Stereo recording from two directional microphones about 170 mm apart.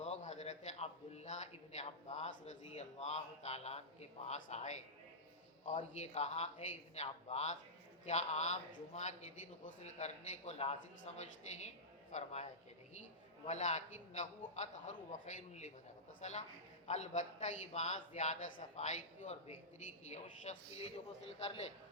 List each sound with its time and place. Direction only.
0.0 s a man's voice: 40° left (ahead or behind)